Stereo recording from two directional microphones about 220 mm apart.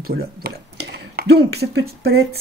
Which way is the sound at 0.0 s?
45° right (ahead or behind).